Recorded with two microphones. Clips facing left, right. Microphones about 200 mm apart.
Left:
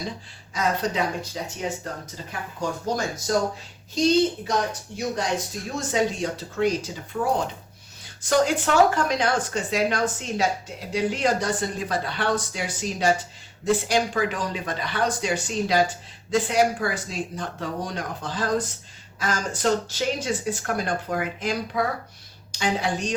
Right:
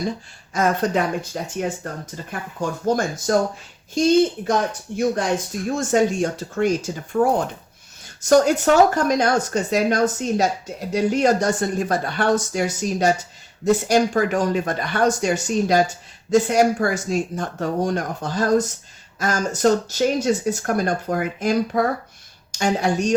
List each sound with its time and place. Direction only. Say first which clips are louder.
0.5 s speech: right 5 dB; 50° right (ahead or behind)